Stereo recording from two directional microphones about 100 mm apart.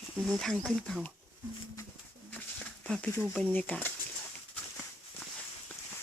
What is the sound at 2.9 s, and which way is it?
Speech, 5° left (ahead or behind).